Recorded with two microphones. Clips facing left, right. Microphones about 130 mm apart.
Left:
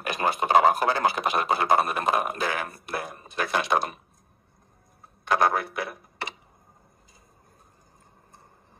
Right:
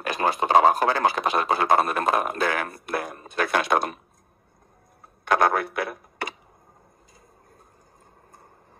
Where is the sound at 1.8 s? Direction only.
5° left (ahead or behind).